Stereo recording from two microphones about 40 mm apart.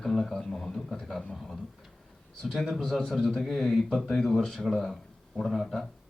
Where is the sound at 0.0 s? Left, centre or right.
Centre.